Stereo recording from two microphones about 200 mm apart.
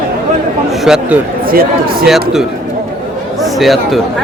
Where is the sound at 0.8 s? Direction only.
5° right (ahead or behind).